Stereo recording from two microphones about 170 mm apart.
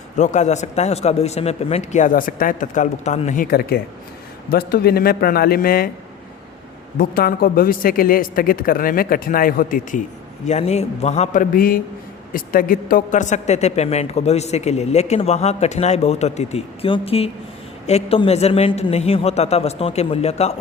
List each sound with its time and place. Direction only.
0.2 s a man's voice: 45° left (ahead or behind); by 5.9 s 60° left (ahead or behind)
7.0 s a woman's voice: 60° left (ahead or behind)
10.4 s a woman's voice: 40° left (ahead or behind)